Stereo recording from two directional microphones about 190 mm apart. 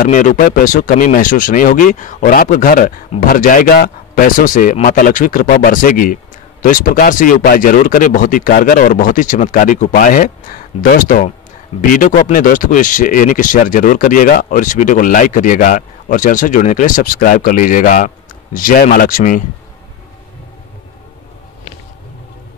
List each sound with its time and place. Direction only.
0.0 s speech: 40° left (ahead or behind)